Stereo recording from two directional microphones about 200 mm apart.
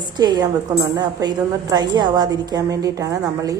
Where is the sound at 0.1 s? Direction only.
20° right (ahead or behind).